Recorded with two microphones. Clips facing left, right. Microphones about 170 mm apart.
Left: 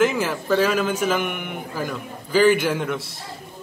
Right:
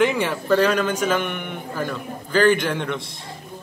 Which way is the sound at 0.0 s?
Centre (ahead or behind).